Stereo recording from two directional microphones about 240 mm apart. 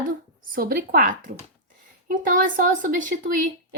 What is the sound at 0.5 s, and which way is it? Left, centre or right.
Speech, right.